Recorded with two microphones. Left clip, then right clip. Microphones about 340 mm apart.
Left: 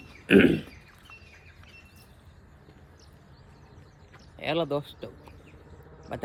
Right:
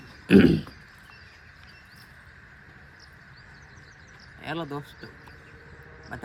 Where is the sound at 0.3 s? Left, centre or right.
Right.